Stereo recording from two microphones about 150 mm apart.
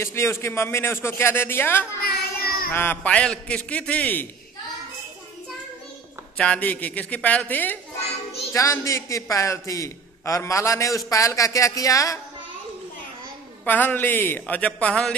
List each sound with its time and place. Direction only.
0.0 s speech: 15° left (ahead or behind)
2.0 s child singing: 85° left
2.7 s speech: 15° left (ahead or behind)
6.3 s a man's voice: 5° left (ahead or behind)
13.7 s speech: 10° left (ahead or behind)